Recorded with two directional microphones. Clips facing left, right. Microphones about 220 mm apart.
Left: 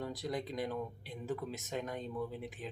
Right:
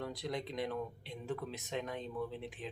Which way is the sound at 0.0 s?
Centre (ahead or behind).